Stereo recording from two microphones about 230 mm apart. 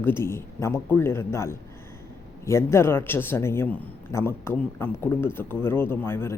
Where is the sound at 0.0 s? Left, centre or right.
Centre.